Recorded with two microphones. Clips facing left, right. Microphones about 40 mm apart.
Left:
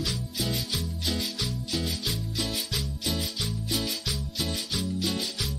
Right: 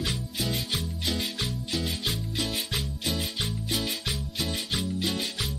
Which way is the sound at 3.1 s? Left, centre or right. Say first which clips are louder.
Right 1 dB; right.